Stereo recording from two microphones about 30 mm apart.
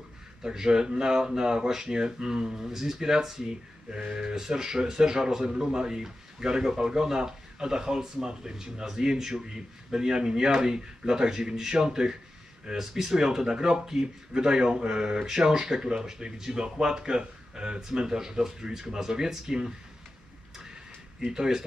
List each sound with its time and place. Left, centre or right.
0.4 s speech: right
15.9 s speech: right
21.2 s speech: centre